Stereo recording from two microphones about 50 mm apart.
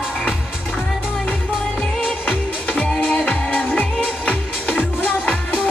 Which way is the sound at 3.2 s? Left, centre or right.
Left.